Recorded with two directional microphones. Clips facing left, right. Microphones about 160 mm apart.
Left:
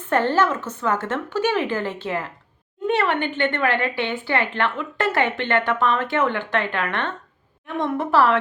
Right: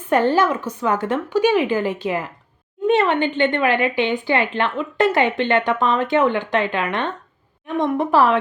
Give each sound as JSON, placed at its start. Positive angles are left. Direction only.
{"t": 0.0, "sound": "speech", "side_deg": -15}